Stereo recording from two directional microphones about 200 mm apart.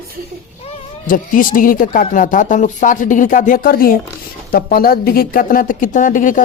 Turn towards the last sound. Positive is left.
turn(degrees=40)  # may be behind; listen again after turning